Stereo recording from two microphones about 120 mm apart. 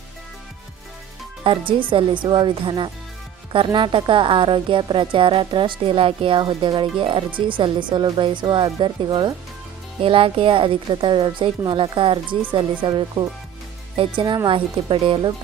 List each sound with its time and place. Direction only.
1.5 s a woman's voice: 45° right (ahead or behind)